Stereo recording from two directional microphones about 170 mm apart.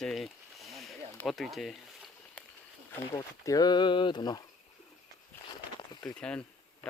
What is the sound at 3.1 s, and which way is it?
Speech, 20° left (ahead or behind).